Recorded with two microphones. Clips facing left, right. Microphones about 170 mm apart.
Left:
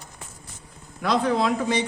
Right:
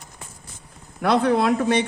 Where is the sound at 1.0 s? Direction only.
60° right (ahead or behind).